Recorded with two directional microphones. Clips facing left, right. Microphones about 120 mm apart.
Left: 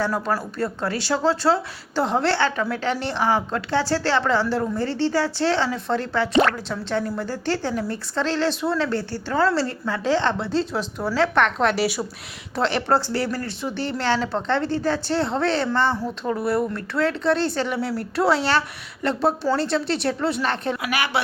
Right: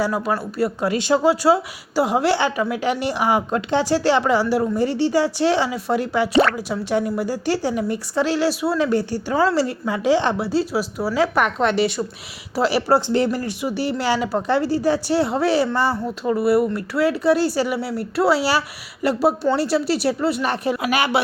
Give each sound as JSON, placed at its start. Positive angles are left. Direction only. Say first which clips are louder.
{"t": 0.0, "sound": "speech", "louder": "right 2 dB", "side_deg": -5}
{"t": 12.5, "sound": "speech", "louder": "right 3 dB", "side_deg": -5}
{"t": 13.1, "sound": "speech", "louder": "right 5 dB", "side_deg": -20}
{"t": 20.8, "sound": "speech", "louder": "right 7 dB", "side_deg": -20}